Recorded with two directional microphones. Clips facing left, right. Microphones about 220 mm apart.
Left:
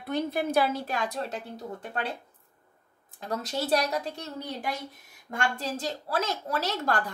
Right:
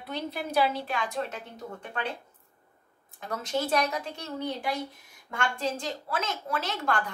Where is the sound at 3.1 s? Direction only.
35° left (ahead or behind).